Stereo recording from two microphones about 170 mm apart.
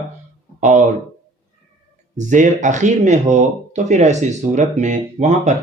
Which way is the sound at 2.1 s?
50° right (ahead or behind).